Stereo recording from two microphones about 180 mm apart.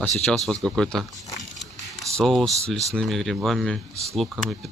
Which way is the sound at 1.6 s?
Centre (ahead or behind).